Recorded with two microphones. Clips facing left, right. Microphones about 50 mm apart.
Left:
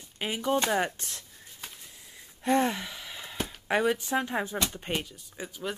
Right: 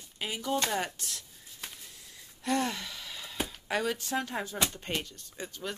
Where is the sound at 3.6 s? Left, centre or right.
Left.